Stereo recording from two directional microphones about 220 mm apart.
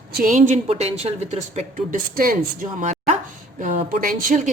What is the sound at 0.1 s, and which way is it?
A woman's voice, 40° right (ahead or behind).